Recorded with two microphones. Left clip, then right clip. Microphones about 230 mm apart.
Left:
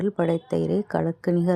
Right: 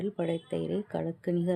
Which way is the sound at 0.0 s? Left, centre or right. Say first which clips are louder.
Left 8 dB; left.